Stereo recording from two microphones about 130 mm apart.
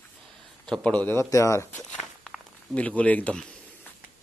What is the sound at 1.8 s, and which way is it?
Walk, 5° left (ahead or behind).